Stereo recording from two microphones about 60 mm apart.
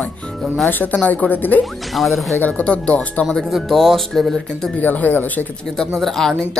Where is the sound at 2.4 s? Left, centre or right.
Centre.